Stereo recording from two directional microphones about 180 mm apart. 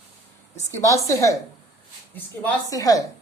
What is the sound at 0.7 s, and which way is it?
A woman's voice, 15° left (ahead or behind).